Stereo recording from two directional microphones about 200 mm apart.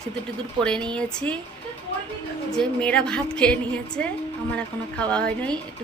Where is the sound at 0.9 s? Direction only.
5° left (ahead or behind).